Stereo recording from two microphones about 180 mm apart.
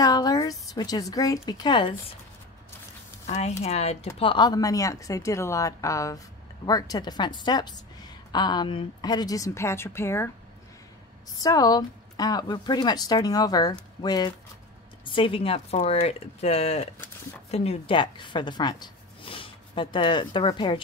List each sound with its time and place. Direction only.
0.0 s a woman's voice: 20° left (ahead or behind)
3.3 s a woman's voice: 40° left (ahead or behind); by 10.3 s 15° left (ahead or behind)
11.4 s a woman's voice: 20° left (ahead or behind)